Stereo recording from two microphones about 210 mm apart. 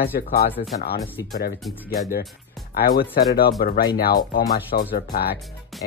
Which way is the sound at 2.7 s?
45° left (ahead or behind).